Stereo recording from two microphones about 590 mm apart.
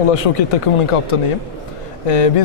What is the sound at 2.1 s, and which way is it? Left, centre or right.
Speech, left.